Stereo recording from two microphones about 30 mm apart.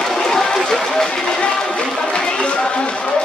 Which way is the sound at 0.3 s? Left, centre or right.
Centre.